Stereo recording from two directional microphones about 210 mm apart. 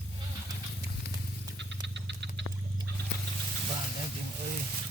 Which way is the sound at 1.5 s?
55° right (ahead or behind).